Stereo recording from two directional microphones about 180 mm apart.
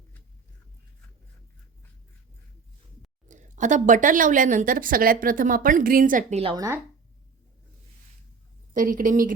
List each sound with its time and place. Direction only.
3.2 s speech: 45° right (ahead or behind)
6.4 s speech: 25° right (ahead or behind)
8.7 s speech: 50° right (ahead or behind)